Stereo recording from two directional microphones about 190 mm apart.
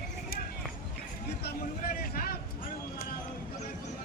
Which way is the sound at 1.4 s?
55° left (ahead or behind).